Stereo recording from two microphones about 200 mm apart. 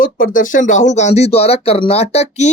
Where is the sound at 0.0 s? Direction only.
40° left (ahead or behind).